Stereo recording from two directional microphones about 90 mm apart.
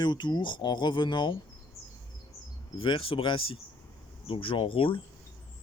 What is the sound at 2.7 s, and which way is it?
Speech, 80° left.